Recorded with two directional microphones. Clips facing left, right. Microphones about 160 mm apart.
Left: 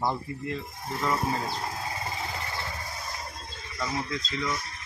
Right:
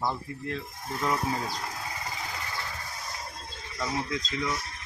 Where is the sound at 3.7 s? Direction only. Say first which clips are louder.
Even; 10° right (ahead or behind).